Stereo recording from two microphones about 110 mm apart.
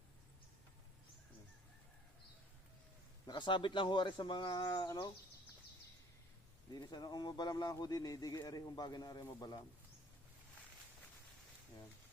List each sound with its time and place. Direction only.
3.2 s speech: 45° left (ahead or behind)
6.7 s speech: 40° left (ahead or behind)